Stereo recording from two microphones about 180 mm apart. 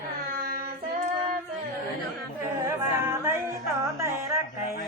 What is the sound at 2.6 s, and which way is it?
Music, 15° right (ahead or behind).